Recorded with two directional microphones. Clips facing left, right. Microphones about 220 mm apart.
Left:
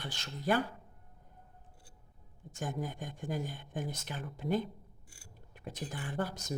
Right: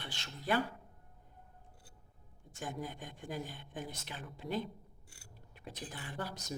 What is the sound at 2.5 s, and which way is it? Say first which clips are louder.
Speech: left 4 dB; 45° left (ahead or behind).